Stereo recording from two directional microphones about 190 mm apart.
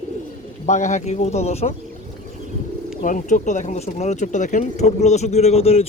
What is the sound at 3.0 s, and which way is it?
Speech, 40° left (ahead or behind).